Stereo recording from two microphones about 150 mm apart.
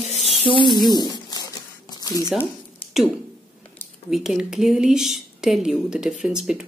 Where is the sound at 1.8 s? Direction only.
25° left (ahead or behind).